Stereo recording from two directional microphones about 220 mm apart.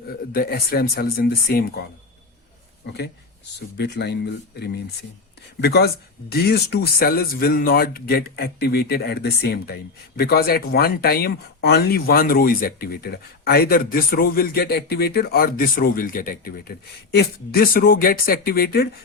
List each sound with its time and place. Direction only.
0.3 s speech: 45° left (ahead or behind)
2.8 s speech: 50° left (ahead or behind)
5.5 s speech: 50° left (ahead or behind)